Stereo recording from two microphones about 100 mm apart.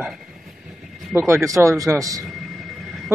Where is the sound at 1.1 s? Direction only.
25° right (ahead or behind).